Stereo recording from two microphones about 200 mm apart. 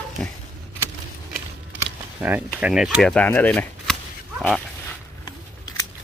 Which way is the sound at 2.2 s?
10° right (ahead or behind).